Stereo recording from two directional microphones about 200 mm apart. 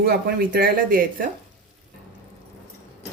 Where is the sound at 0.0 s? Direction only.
50° right (ahead or behind).